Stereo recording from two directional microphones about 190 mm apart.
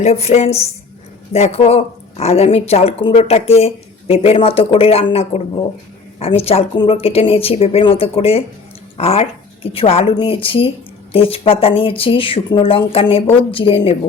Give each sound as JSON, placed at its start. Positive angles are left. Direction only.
{"t": 0.0, "sound": "speech", "side_deg": 35}